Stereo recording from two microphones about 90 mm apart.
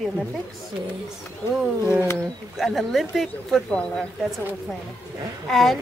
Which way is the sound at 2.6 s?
Centre (ahead or behind).